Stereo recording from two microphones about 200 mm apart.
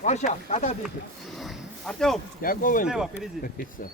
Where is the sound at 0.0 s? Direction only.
35° left (ahead or behind).